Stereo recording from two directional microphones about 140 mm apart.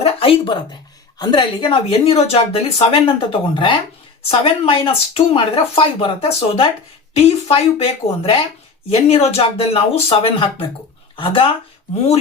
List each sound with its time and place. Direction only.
0.0 s a woman's voice: 40° left (ahead or behind)